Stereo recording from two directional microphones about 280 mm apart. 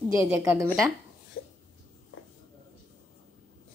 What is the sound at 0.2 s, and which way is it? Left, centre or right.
Speech, centre.